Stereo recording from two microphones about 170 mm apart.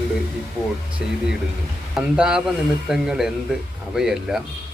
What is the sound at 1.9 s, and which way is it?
A man's voice, 5° right (ahead or behind).